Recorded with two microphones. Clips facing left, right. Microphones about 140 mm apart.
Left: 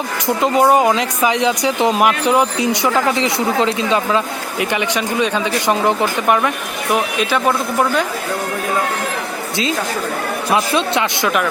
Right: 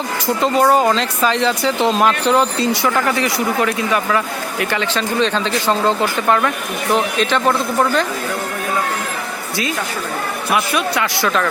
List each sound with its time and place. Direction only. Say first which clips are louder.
0.4 s speech: left 1 dB; 15° left (ahead or behind)
10.5 s speech: left 2 dB; 25° left (ahead or behind)